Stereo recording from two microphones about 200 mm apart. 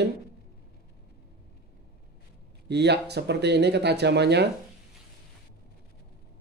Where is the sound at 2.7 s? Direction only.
55° right (ahead or behind).